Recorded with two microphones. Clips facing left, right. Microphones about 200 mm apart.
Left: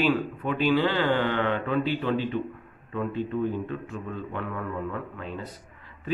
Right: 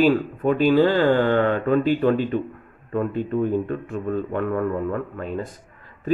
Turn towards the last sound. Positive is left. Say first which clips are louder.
# right 7 dB
turn(degrees=-45)  # may be behind; listen again after turning